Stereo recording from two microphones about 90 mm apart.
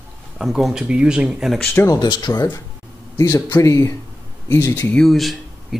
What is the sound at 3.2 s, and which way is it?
A man's voice, 35° left (ahead or behind).